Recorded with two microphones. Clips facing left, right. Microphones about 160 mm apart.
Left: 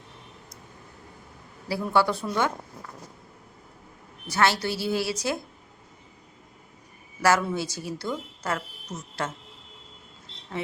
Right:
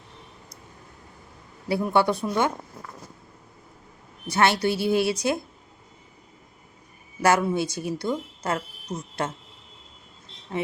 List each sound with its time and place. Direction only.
1.6 s speech: 20° right (ahead or behind)
4.3 s a woman's voice: 20° right (ahead or behind)
7.2 s a woman's voice: 20° right (ahead or behind)